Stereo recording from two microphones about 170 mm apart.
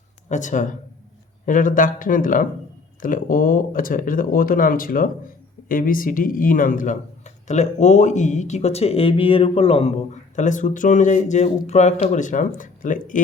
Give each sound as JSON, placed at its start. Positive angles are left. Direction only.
{"t": 0.3, "sound": "speech", "side_deg": 45}